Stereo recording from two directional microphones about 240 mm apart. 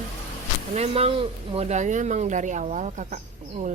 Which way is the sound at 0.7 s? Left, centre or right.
Right.